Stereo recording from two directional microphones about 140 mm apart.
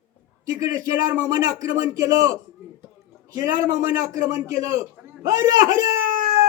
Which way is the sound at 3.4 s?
25° right (ahead or behind).